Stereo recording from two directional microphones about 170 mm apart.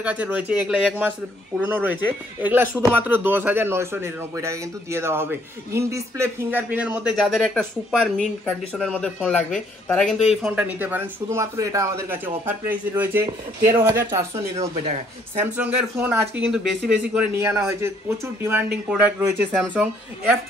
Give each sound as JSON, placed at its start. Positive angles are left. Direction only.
{"t": 0.0, "sound": "speech", "side_deg": -10}
{"t": 14.3, "sound": "speech", "side_deg": -40}
{"t": 15.4, "sound": "speech", "side_deg": -10}